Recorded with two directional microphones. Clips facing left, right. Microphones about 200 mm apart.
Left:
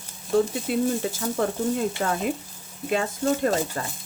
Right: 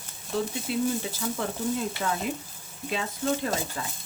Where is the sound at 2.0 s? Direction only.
50° left (ahead or behind).